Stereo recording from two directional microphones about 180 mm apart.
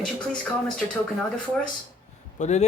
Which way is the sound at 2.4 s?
40° left (ahead or behind).